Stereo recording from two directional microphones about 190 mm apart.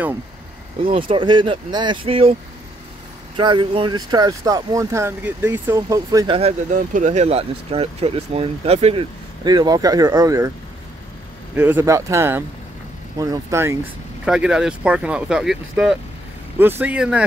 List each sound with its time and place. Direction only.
1.0 s speech: 25° right (ahead or behind)
3.3 s speech: 25° right (ahead or behind)
6.7 s speech: 40° right (ahead or behind); by 10.5 s 20° right (ahead or behind)
11.5 s speech: 10° right (ahead or behind)
14.2 s speech: 5° right (ahead or behind)